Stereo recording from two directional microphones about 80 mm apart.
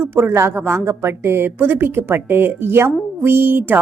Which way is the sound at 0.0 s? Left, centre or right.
Right.